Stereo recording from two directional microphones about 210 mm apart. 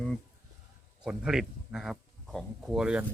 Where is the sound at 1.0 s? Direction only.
5° right (ahead or behind).